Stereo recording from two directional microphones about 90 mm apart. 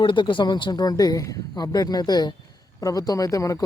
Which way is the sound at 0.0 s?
65° left (ahead or behind).